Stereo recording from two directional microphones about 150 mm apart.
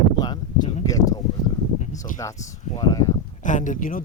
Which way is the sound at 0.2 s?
25° left (ahead or behind).